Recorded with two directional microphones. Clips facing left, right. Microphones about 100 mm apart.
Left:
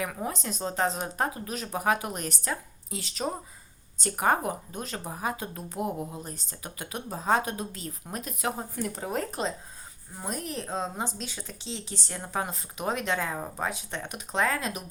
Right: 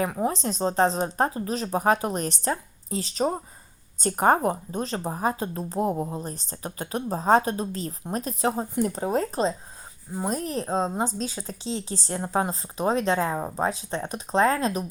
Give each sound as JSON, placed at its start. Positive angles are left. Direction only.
{"t": 0.0, "sound": "speech", "side_deg": -30}